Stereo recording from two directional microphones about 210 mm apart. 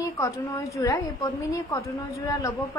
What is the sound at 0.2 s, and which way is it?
A woman's voice, 15° left (ahead or behind).